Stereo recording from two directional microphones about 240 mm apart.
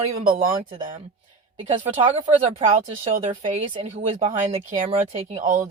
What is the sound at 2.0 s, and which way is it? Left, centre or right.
Speech, right.